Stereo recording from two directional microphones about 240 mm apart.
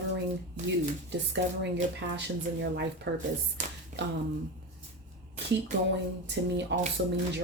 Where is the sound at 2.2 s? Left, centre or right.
Right.